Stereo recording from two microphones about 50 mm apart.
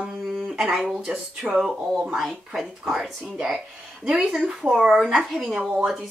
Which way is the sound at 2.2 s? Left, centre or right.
Centre.